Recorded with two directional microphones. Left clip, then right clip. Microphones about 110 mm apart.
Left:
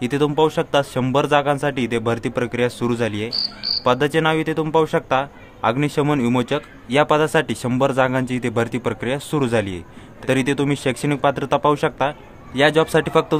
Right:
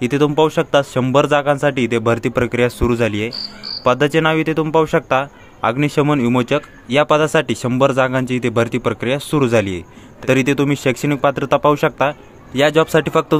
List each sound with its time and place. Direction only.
0.0 s speech: 35° right (ahead or behind)